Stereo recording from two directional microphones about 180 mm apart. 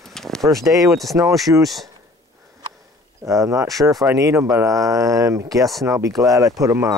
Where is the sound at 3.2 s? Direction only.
15° right (ahead or behind).